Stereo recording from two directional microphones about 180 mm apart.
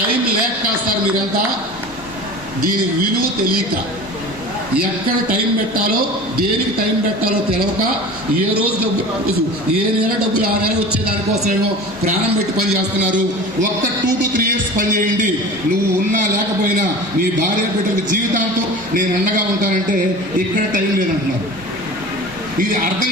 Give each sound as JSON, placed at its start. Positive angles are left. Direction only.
{"t": 5.8, "sound": "a man's voice", "side_deg": -55}
{"t": 14.3, "sound": "speech", "side_deg": -50}